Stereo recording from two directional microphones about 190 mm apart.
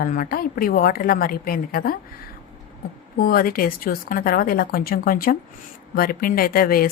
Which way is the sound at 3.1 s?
50° left (ahead or behind).